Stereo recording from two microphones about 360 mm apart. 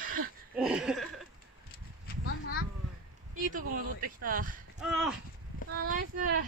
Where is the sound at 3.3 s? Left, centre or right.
Right.